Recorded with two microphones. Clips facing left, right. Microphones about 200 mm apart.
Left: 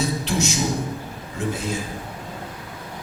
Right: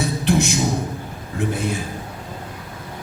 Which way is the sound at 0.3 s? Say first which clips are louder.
Right 10 dB; 55° right (ahead or behind).